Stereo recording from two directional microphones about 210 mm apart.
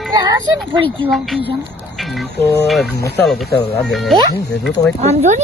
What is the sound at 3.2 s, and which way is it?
Speech, 5° left (ahead or behind).